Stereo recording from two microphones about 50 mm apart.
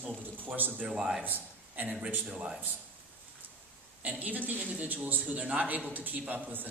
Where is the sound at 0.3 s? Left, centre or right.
Right.